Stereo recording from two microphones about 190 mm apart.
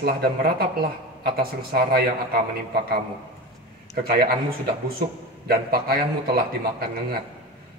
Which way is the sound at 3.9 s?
55° right (ahead or behind).